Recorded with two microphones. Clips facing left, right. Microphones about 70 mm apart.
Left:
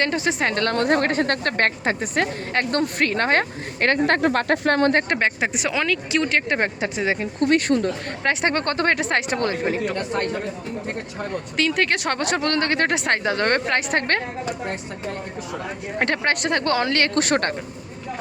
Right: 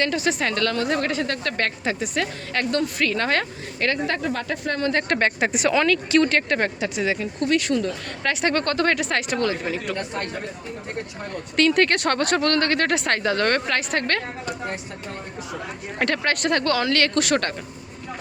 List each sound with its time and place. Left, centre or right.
0.0 s a woman's voice: left
0.8 s a woman's voice: left
5.2 s speech: centre
6.6 s a woman's voice: left
11.5 s speech: centre; by 14.2 s left
16.0 s speech: left